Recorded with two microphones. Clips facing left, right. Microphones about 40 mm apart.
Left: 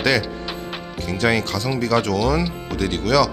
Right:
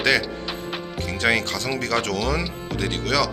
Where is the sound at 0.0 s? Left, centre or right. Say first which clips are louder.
Left 1 dB; right.